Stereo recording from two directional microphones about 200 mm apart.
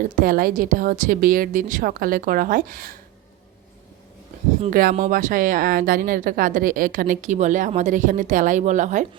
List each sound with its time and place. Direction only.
0.2 s a woman's voice: 45° right (ahead or behind)
4.7 s speech: 45° right (ahead or behind)